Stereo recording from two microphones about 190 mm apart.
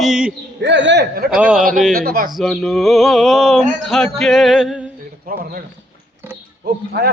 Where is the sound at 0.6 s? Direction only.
70° right (ahead or behind).